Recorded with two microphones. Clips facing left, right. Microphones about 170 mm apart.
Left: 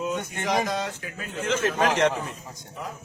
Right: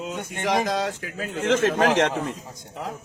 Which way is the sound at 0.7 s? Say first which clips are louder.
Right 4 dB; 75° right (ahead or behind).